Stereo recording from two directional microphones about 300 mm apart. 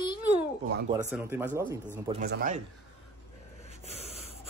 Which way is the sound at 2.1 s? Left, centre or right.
Right.